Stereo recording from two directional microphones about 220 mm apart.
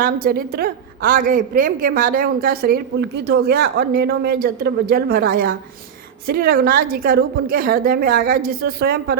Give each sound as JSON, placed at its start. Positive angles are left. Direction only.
{"t": 0.0, "sound": "a woman's voice", "side_deg": -40}